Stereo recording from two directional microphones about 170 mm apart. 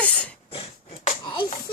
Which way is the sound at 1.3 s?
30° left (ahead or behind).